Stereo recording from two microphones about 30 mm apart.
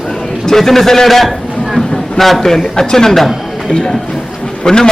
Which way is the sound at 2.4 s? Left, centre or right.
Centre.